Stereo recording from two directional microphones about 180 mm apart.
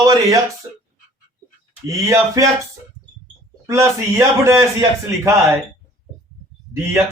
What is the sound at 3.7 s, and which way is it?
Speech, 15° right (ahead or behind).